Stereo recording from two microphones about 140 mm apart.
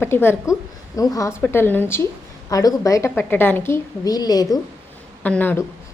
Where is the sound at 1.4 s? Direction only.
15° left (ahead or behind).